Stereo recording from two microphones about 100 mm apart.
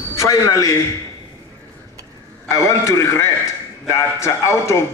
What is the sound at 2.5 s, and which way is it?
A man's voice, 30° left (ahead or behind).